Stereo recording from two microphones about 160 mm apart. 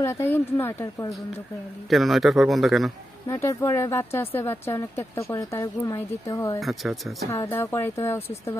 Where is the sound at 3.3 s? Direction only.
15° left (ahead or behind).